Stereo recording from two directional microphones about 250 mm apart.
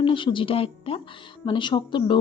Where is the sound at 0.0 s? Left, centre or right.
Centre.